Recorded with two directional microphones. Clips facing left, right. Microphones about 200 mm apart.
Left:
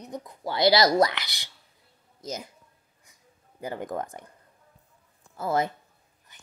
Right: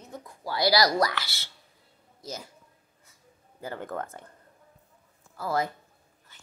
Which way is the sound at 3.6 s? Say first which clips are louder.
Left 3 dB; 15° left (ahead or behind).